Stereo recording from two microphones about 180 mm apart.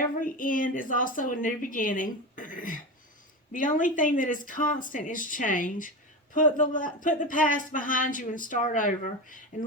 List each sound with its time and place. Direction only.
0.2 s a woman's voice: 50° left (ahead or behind)